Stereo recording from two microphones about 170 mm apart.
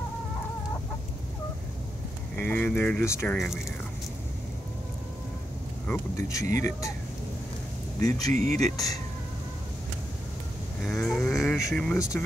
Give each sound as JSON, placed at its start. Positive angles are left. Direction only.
{"t": 2.4, "sound": "speech", "side_deg": 10}
{"t": 5.9, "sound": "speech", "side_deg": 15}
{"t": 8.3, "sound": "speech", "side_deg": -55}
{"t": 8.7, "sound": "speech", "side_deg": 20}
{"t": 10.8, "sound": "speech", "side_deg": 0}